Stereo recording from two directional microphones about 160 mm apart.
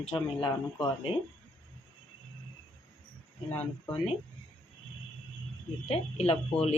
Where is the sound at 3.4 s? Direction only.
10° left (ahead or behind).